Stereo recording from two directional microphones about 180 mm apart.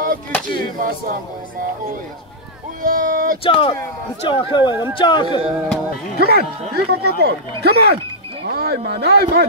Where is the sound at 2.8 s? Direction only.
50° right (ahead or behind).